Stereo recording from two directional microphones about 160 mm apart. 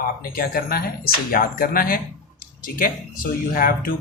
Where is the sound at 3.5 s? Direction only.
65° left (ahead or behind).